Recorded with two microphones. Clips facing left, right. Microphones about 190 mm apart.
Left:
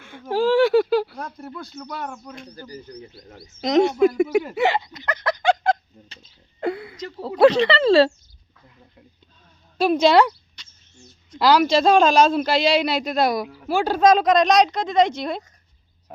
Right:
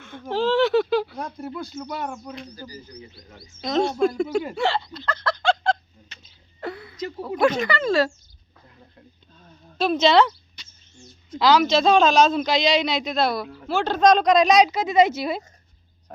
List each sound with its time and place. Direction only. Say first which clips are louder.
0.0 s speech: left 3 dB; 10° left (ahead or behind)
2.6 s speech: left 3 dB; 60° left (ahead or behind)
3.2 s speech: left 3 dB; 35° left (ahead or behind)
3.6 s speech: left 5 dB; 15° left (ahead or behind)
4.2 s speech: left 4 dB; 5° left (ahead or behind)
4.5 s snicker: left 3 dB; 15° left (ahead or behind)
7.2 s speech: left 6 dB; 35° left (ahead or behind)
9.7 s speech: left 2 dB; 10° left (ahead or behind)
10.6 s rodents: right 2 dB; 5° right (ahead or behind)
11.3 s speech: left 1 dB; 10° left (ahead or behind)